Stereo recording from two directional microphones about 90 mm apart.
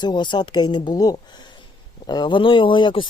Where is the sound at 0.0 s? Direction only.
60° left (ahead or behind).